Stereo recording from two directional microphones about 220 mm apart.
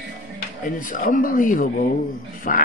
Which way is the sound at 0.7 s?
35° left (ahead or behind).